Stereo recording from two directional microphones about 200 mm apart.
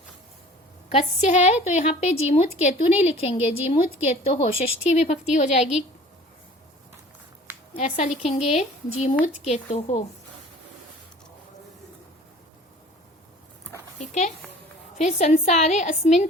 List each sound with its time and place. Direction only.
0.9 s a woman's voice: 35° left (ahead or behind)
7.8 s a woman's voice: 40° left (ahead or behind)
14.0 s a woman's voice: 35° left (ahead or behind)